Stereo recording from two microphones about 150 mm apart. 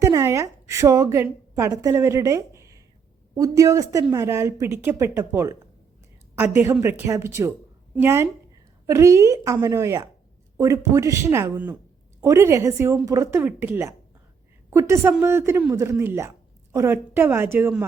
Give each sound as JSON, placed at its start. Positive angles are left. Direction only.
{"t": 0.0, "sound": "a woman's voice", "side_deg": -20}